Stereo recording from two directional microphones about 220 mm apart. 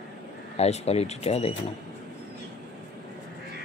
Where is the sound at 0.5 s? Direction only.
30° left (ahead or behind).